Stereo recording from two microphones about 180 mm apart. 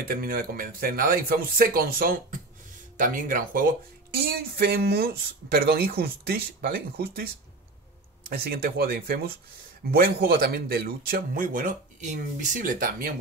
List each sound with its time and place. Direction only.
0.1 s speech: 55° right (ahead or behind)
8.3 s speech: 55° right (ahead or behind)